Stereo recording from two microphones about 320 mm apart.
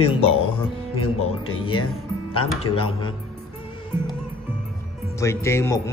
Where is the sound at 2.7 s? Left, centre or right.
Centre.